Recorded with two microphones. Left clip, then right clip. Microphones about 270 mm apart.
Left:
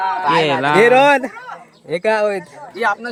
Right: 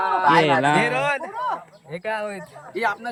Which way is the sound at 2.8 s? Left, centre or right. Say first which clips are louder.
Left 5 dB; centre.